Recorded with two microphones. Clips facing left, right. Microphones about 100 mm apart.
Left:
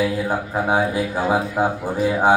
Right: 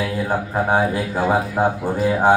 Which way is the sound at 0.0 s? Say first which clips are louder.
Left 1 dB; 5° left (ahead or behind).